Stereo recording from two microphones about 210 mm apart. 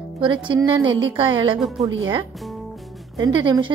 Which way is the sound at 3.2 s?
20° right (ahead or behind).